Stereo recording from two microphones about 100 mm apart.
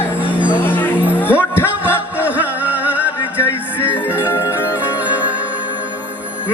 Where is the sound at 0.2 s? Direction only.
15° right (ahead or behind).